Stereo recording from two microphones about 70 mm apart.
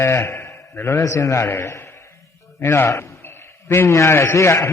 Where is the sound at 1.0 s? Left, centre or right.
Left.